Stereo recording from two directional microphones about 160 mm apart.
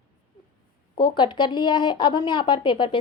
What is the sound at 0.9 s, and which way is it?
A woman's voice, 30° left (ahead or behind).